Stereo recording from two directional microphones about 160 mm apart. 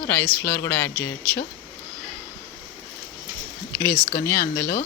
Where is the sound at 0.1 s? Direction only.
10° left (ahead or behind).